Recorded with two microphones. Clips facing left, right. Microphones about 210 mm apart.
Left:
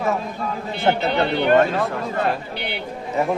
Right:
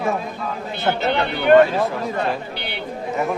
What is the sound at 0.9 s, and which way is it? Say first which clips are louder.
Speech: left 2 dB; 25° left (ahead or behind).